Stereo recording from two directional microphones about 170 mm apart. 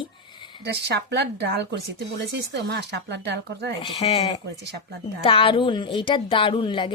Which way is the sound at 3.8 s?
30° left (ahead or behind).